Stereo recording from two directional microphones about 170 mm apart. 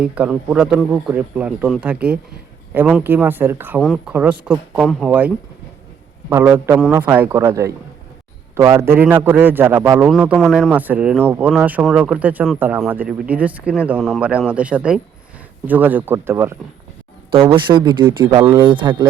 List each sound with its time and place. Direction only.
0.0 s speech: 5° right (ahead or behind)
3.8 s speech: centre (ahead or behind)
10.7 s speech: 10° right (ahead or behind)
17.4 s speech: 25° right (ahead or behind)